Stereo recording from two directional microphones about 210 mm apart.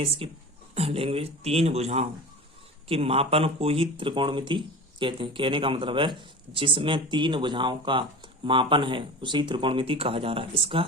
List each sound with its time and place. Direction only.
0.0 s speech: 25° right (ahead or behind)